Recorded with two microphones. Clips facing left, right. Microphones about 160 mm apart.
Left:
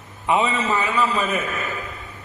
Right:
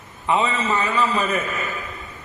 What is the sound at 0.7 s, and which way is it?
Speech, centre (ahead or behind).